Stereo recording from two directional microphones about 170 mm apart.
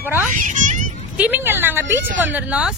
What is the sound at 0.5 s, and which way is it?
Children playing, 50° right (ahead or behind).